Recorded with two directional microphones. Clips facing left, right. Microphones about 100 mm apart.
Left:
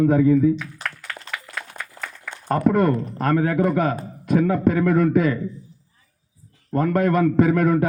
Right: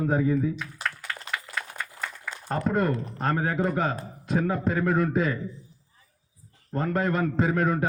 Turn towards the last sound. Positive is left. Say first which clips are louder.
# left 7 dB
turn(degrees=60)  # may be behind; listen again after turning